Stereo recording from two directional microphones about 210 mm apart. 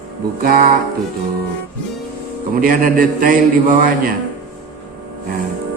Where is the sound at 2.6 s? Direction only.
40° right (ahead or behind).